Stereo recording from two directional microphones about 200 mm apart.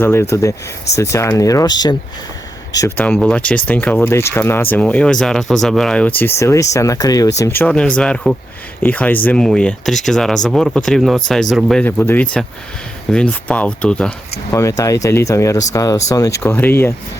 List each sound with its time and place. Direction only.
0.0 s speech: 10° left (ahead or behind)
2.7 s speech: 15° left (ahead or behind)
14.5 s speech: 15° left (ahead or behind)